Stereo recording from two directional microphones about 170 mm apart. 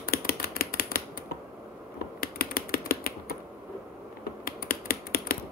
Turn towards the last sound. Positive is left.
turn(degrees=60)  # may be behind; listen again after turning